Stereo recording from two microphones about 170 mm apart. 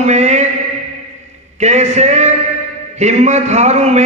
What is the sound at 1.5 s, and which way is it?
A man's voice, 40° right (ahead or behind).